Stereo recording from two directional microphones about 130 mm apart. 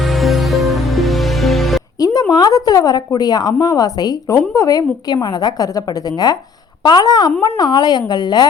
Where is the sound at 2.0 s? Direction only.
30° left (ahead or behind).